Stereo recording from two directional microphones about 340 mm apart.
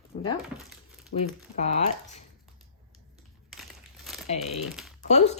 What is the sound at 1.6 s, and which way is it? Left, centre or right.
Speech, centre.